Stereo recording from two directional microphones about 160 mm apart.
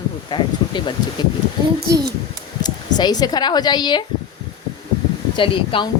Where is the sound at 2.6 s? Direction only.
25° left (ahead or behind).